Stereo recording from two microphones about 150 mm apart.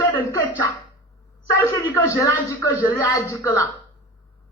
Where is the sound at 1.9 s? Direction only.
15° left (ahead or behind).